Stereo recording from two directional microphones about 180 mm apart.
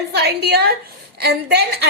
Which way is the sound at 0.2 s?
65° right (ahead or behind).